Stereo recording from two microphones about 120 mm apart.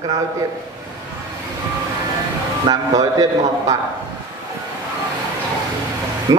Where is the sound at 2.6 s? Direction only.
30° right (ahead or behind).